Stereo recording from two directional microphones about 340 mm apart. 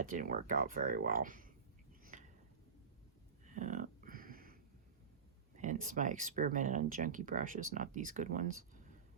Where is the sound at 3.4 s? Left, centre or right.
Right.